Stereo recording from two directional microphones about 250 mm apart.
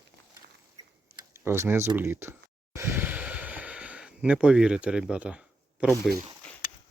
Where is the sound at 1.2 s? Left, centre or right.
Centre.